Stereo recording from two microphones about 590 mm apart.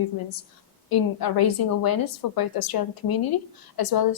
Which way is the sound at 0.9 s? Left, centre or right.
Left.